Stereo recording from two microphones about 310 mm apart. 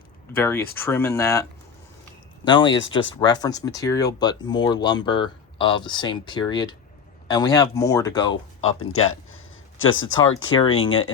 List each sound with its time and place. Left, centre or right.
0.3 s speech: centre
2.5 s speech: centre
8.3 s speech: left
10.5 s speech: centre